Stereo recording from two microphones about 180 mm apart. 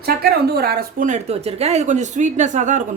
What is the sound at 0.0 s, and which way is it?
Speech, 60° right (ahead or behind).